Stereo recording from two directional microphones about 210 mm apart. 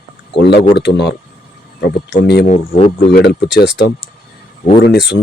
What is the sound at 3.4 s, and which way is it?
Speech, 55° left (ahead or behind).